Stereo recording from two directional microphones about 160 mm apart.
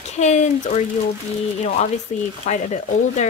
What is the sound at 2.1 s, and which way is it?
Speech, 50° left (ahead or behind).